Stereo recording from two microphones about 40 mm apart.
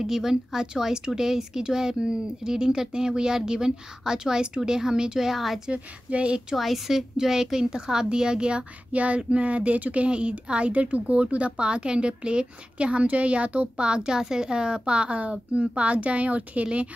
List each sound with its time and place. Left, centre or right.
0.0 s speech: centre
5.7 s a woman's voice: right
6.5 s a woman's voice: centre; by 16.6 s right